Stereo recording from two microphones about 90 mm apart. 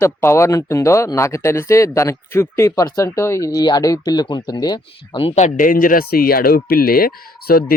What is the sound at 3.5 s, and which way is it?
Speech, 50° left (ahead or behind).